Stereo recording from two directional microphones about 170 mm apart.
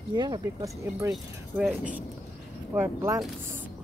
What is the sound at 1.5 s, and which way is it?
Speech, 5° right (ahead or behind).